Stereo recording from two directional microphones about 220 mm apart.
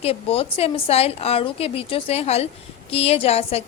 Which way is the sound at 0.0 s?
25° left (ahead or behind).